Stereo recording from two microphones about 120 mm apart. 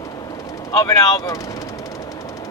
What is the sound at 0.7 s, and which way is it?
Speech, 25° left (ahead or behind).